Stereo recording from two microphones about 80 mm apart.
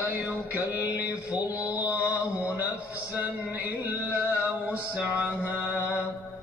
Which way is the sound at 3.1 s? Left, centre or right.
Right.